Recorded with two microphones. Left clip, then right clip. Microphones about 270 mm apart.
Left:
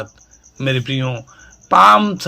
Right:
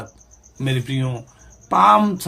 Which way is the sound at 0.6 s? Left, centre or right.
Centre.